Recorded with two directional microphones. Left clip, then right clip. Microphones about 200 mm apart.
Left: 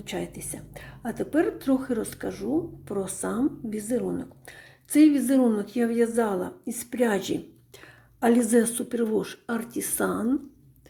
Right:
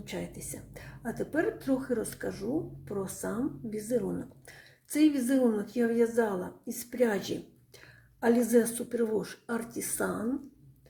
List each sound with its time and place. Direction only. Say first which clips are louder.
0.0 s a woman's voice: left 6 dB; 25° left (ahead or behind)